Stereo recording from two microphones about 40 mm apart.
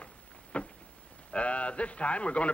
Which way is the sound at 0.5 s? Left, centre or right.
Left.